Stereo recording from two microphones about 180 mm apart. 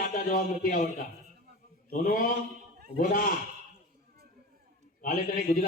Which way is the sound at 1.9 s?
50° left (ahead or behind).